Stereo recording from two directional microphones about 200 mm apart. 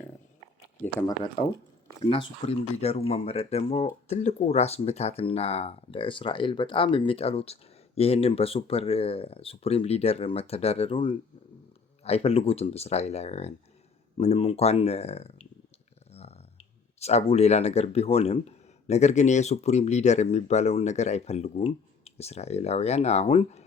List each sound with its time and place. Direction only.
0.9 s speech: 20° left (ahead or behind)
16.1 s a sound: 30° left (ahead or behind)
17.0 s speech: 30° left (ahead or behind)